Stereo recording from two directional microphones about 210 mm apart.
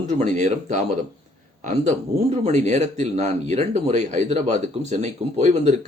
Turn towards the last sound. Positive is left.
turn(degrees=-30)  # may be behind; listen again after turning